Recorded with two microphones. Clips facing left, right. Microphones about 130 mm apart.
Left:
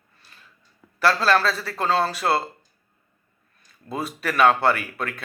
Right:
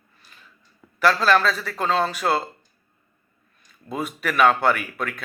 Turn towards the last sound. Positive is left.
turn(degrees=30)  # may be behind; listen again after turning